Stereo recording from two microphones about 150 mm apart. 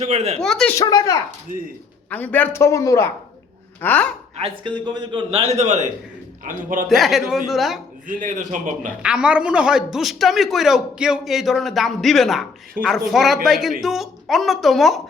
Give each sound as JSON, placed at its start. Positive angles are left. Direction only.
{"t": 0.0, "sound": "speech", "side_deg": -45}
{"t": 0.3, "sound": "a man's voice", "side_deg": 5}
{"t": 0.8, "sound": "speech", "side_deg": 25}
{"t": 1.5, "sound": "a man's voice", "side_deg": -65}
{"t": 2.0, "sound": "speech", "side_deg": 10}
{"t": 4.4, "sound": "a man's voice", "side_deg": -35}
{"t": 6.4, "sound": "a man's voice", "side_deg": -65}
{"t": 6.8, "sound": "a man's voice", "side_deg": 0}
{"t": 8.0, "sound": "a man's voice", "side_deg": -60}
{"t": 9.0, "sound": "a man's voice", "side_deg": -5}